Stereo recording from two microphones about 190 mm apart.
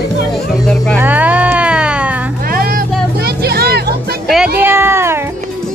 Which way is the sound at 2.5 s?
50° right (ahead or behind).